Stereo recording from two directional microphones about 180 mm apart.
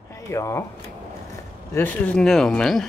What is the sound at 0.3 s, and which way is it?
Speech, 15° left (ahead or behind).